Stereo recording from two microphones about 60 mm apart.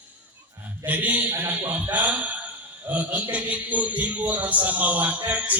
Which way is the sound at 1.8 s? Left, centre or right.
Right.